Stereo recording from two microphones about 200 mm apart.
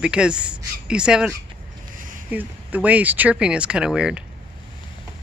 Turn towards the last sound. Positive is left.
turn(degrees=-5)  # may be behind; listen again after turning